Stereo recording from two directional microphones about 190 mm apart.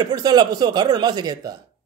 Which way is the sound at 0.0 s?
20° right (ahead or behind).